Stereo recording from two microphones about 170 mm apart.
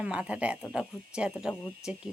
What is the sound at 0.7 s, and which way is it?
Speech, 5° right (ahead or behind).